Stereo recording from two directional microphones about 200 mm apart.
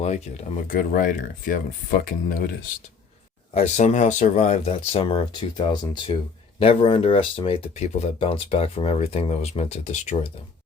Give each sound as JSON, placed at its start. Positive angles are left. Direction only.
{"t": 0.0, "sound": "speech", "side_deg": 35}
{"t": 3.5, "sound": "speech", "side_deg": 35}